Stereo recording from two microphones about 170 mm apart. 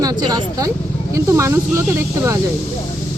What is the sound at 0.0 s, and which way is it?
Speech, 20° right (ahead or behind).